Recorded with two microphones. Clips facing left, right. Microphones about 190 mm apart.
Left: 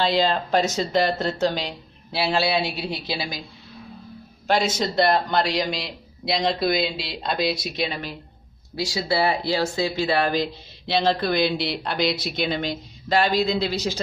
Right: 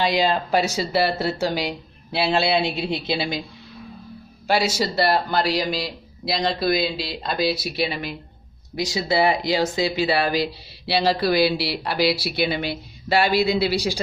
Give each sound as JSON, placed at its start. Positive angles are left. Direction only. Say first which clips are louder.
{"t": 0.0, "sound": "speech", "louder": "right 1 dB", "side_deg": -10}
{"t": 2.1, "sound": "a man's voice", "louder": "right 2 dB", "side_deg": -20}
{"t": 4.5, "sound": "a man's voice", "louder": "right 1 dB", "side_deg": -10}